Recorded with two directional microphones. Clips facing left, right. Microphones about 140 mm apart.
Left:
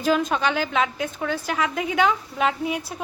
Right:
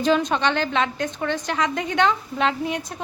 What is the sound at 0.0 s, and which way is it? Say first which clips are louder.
A woman's voice: right 1 dB; 5° left (ahead or behind).